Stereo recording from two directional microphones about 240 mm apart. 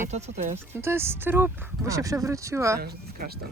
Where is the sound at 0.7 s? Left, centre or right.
Centre.